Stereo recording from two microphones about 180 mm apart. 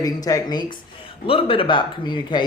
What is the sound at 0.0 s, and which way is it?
Speech, 20° left (ahead or behind).